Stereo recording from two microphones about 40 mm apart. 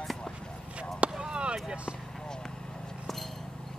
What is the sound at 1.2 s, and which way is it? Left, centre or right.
Basketball bounce, right.